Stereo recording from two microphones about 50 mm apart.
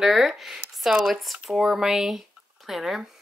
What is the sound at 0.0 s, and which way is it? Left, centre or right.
A woman's voice, centre.